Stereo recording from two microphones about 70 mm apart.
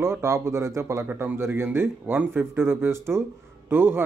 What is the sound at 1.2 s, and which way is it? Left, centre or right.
Speech, right.